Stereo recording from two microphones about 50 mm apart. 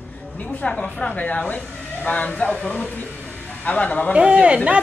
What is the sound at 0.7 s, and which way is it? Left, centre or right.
Speech, centre.